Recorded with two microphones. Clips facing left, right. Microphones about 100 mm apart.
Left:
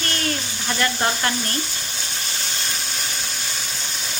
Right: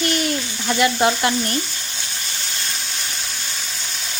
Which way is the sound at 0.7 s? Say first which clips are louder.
Right 5 dB; 10° right (ahead or behind).